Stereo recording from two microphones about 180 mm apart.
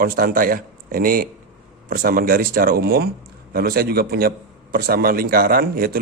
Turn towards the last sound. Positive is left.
turn(degrees=-55)  # may be behind; listen again after turning